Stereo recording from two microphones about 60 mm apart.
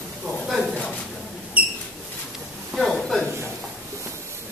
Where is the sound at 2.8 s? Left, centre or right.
Centre.